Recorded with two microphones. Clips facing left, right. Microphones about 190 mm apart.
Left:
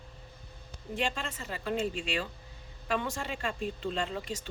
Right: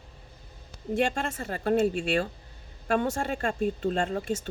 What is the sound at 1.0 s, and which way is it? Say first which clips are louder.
Speech: right 6 dB; 50° right (ahead or behind).